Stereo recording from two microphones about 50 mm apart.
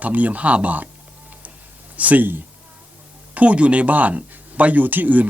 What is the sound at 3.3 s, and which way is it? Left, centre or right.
Speech, right.